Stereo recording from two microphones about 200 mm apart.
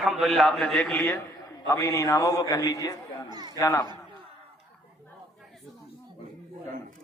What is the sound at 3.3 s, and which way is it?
Speech, 20° right (ahead or behind).